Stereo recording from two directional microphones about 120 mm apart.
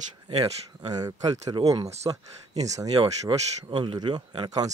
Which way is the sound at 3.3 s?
25° right (ahead or behind).